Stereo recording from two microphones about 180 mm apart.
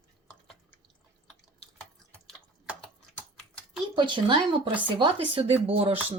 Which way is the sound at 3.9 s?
25° right (ahead or behind).